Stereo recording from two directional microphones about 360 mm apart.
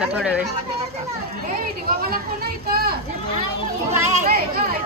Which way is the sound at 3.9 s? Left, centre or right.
Right.